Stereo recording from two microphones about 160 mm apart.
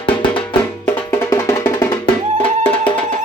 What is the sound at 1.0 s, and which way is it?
Music, 20° left (ahead or behind).